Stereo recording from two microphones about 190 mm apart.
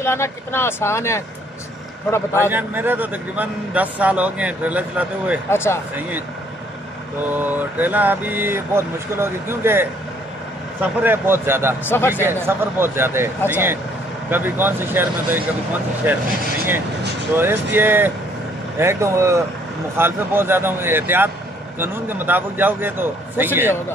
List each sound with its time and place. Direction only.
0.0 s speech: 15° left (ahead or behind)
2.5 s speech: 10° right (ahead or behind)
5.5 s speech: 15° left (ahead or behind)
5.9 s speech: 10° right (ahead or behind)
7.3 s speech: 10° right (ahead or behind)
11.8 s speech: 10° left (ahead or behind)
12.3 s speech: 10° right (ahead or behind)
17.4 s speech: 10° right (ahead or behind)